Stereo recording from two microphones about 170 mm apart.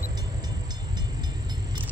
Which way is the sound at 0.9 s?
25° right (ahead or behind).